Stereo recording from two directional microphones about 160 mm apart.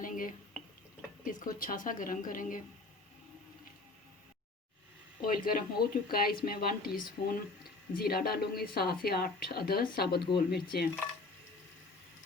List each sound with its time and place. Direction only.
0.0 s drip: 60° left (ahead or behind)
1.2 s speech: 60° left (ahead or behind)
5.2 s a woman's voice: 60° left (ahead or behind); by 10.8 s 85° left